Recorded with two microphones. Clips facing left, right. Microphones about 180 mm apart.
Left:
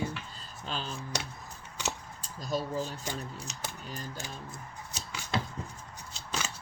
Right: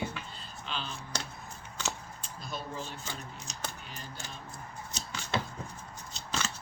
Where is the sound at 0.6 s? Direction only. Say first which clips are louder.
Left 2 dB; 40° left (ahead or behind).